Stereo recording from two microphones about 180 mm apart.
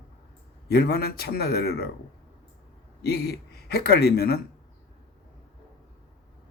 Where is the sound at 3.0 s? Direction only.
60° left (ahead or behind).